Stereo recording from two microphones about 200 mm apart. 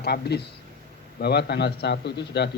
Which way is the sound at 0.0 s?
55° left (ahead or behind).